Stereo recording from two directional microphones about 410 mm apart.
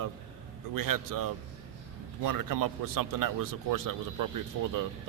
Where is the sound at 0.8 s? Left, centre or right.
Right.